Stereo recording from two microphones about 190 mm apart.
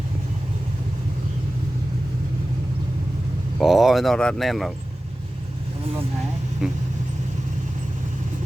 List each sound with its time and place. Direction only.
3.6 s speech: centre (ahead or behind)
6.6 s speech: 5° right (ahead or behind)